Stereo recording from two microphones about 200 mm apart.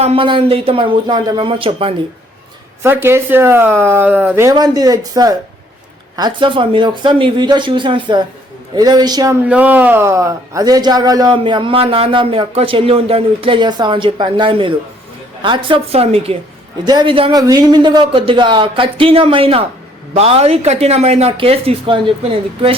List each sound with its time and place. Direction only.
0.0 s speech: 30° right (ahead or behind)
2.8 s speech: 10° right (ahead or behind)
9.5 s speech: 10° right (ahead or behind); by 22.7 s 30° right (ahead or behind)